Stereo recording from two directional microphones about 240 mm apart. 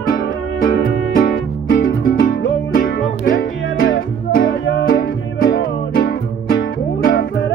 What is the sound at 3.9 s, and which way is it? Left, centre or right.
Music, left.